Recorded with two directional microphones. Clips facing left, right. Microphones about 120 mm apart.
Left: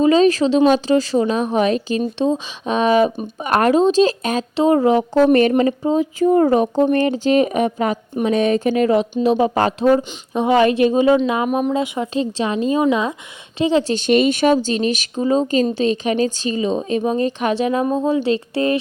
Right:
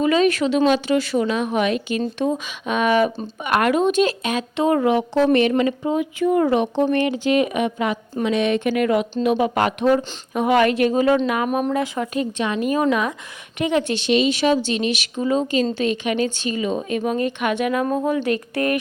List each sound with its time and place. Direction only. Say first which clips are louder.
0.0 s speech: left 4 dB; 30° left (ahead or behind)
4.6 s speech: left 4 dB; 30° left (ahead or behind)
13.9 s speech: left 3 dB; 50° left (ahead or behind); by 18.8 s 25° left (ahead or behind)